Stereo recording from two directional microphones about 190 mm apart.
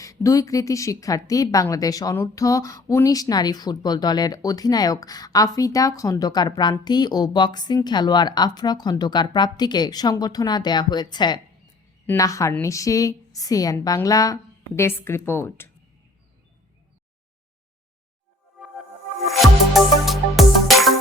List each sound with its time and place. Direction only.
0.0 s a woman's voice: 15° left (ahead or behind)
19.3 s music: centre (ahead or behind)